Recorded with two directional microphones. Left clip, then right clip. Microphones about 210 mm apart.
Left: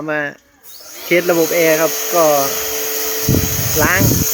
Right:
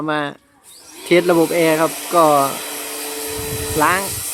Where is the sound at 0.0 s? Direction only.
15° right (ahead or behind).